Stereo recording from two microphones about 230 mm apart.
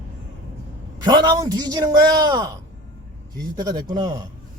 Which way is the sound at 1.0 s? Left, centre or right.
Centre.